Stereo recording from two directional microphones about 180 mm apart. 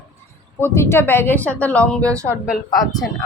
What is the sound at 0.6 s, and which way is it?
Speech, 15° left (ahead or behind).